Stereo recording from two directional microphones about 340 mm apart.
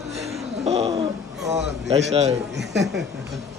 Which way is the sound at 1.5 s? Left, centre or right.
Centre.